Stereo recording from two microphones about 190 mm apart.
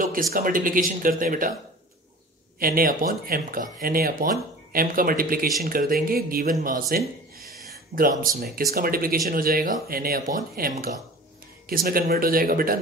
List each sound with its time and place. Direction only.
0.0 s speech: 45° right (ahead or behind)
2.6 s speech: 50° right (ahead or behind)